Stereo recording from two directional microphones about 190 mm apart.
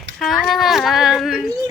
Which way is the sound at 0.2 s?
Centre (ahead or behind).